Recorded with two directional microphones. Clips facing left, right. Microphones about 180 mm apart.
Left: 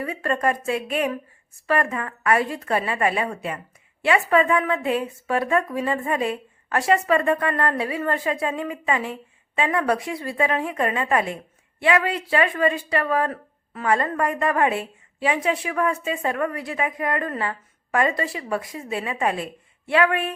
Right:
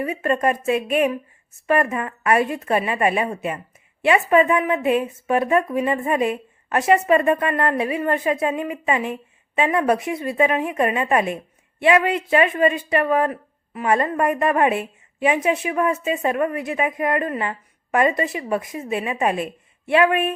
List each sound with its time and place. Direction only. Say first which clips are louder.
0.0 s speech: right 3 dB; 20° right (ahead or behind)